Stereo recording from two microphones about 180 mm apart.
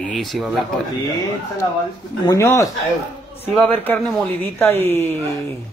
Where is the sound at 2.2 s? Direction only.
15° left (ahead or behind).